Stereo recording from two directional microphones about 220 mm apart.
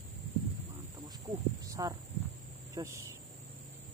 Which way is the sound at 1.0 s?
15° right (ahead or behind).